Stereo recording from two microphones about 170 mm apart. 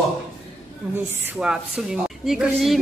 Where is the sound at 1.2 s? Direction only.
5° right (ahead or behind).